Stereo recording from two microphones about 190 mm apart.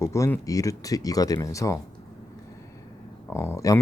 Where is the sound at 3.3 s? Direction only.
15° left (ahead or behind).